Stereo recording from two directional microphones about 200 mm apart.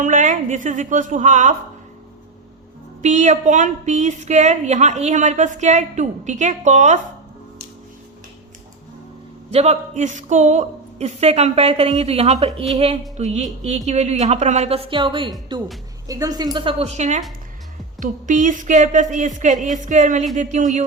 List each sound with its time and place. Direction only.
0.0 s a woman's voice: 40° right (ahead or behind)
3.0 s a woman's voice: 35° right (ahead or behind)
9.5 s a woman's voice: 35° right (ahead or behind)
13.1 s music: 35° right (ahead or behind)
13.7 s a woman's voice: 35° right (ahead or behind)